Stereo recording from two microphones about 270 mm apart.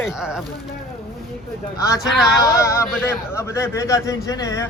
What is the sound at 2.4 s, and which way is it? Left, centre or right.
Speech, centre.